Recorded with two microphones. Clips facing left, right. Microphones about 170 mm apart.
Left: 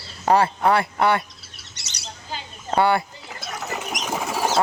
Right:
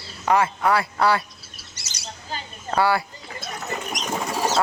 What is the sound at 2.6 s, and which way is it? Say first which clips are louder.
Speech: left 2 dB; 25° left (ahead or behind).